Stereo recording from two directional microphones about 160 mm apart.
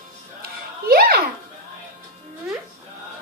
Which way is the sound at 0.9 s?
70° right (ahead or behind).